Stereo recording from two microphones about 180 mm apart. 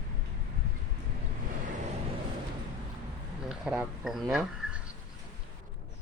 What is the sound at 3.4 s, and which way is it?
Speech, 5° right (ahead or behind).